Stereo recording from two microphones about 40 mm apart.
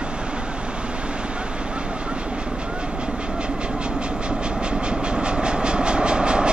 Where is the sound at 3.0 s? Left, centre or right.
Right.